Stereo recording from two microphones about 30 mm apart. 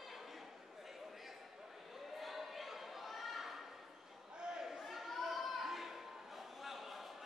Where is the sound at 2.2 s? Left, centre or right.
Centre.